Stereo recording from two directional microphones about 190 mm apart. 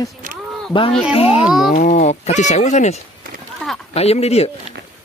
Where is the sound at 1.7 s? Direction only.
45° left (ahead or behind).